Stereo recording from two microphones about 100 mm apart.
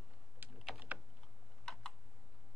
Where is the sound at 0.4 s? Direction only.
20° right (ahead or behind).